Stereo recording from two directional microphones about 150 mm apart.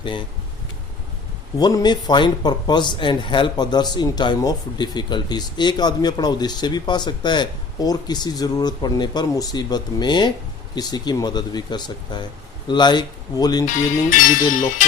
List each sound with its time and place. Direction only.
1.5 s a man's voice: 25° left (ahead or behind)
13.7 s speech: 60° left (ahead or behind)